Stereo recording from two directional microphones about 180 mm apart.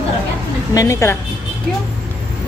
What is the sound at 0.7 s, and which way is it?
Speech, 15° left (ahead or behind).